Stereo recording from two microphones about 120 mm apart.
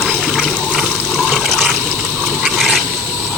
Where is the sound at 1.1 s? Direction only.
5° right (ahead or behind).